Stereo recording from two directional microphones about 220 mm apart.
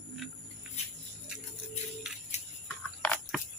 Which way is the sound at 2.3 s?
30° left (ahead or behind).